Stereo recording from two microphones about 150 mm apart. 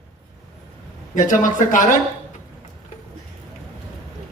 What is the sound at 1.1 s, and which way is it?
Speech, 60° left (ahead or behind).